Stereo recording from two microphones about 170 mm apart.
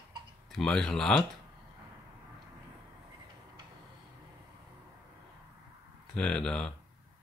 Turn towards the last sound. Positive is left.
turn(degrees=5)  # may be behind; listen again after turning